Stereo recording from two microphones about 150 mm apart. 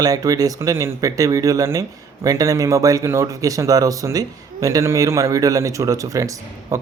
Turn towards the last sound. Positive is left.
turn(degrees=-20)  # may be behind; listen again after turning